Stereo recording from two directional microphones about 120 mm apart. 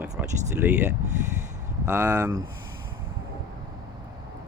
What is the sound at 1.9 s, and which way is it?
Speech, 20° right (ahead or behind).